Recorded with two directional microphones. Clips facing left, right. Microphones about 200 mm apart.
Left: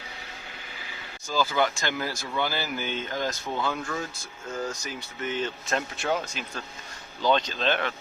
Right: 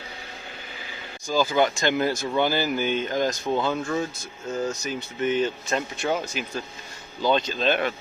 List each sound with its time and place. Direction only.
1.3 s speech: 15° right (ahead or behind)
5.6 s speech: centre (ahead or behind)